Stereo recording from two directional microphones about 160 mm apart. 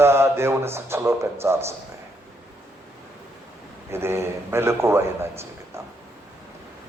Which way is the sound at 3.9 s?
15° right (ahead or behind).